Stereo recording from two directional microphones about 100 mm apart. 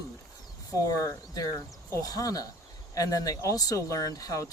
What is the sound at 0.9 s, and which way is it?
Speech, 35° left (ahead or behind).